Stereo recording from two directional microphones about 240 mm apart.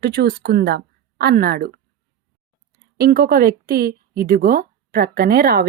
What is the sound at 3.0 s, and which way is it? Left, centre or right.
Speech, right.